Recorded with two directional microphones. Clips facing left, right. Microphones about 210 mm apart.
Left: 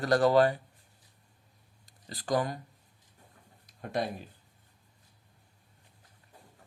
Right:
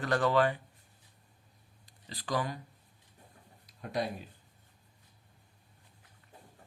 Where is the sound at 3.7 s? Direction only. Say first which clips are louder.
Left 2 dB; 50° left (ahead or behind).